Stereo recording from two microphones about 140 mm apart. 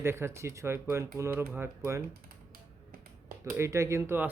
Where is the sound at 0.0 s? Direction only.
20° right (ahead or behind).